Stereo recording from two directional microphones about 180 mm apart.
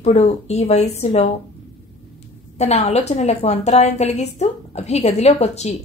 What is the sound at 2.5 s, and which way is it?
A woman's voice, 35° left (ahead or behind).